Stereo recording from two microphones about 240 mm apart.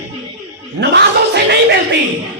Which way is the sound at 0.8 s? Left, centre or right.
Right.